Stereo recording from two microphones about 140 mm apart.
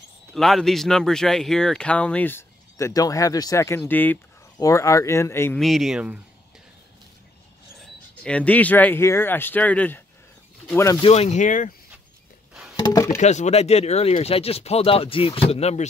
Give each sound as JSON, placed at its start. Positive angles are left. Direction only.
{"t": 0.3, "sound": "speech", "side_deg": 0}
{"t": 5.6, "sound": "speech", "side_deg": 0}
{"t": 7.8, "sound": "speech", "side_deg": 10}
{"t": 11.0, "sound": "speech", "side_deg": 45}
{"t": 12.7, "sound": "speech", "side_deg": 25}
{"t": 13.2, "sound": "speech", "side_deg": 55}